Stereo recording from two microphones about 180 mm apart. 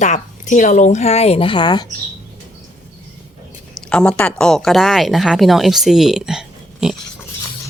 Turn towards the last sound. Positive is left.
turn(degrees=-5)  # may be behind; listen again after turning